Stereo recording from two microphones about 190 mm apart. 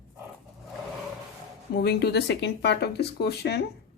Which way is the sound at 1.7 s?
60° left (ahead or behind).